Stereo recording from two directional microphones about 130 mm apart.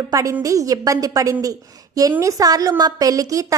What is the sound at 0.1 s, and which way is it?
A woman's voice, 25° right (ahead or behind).